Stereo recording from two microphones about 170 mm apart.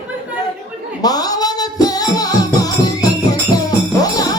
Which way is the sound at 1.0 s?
20° left (ahead or behind).